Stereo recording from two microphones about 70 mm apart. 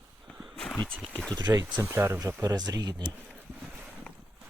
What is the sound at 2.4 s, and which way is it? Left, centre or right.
Speech, right.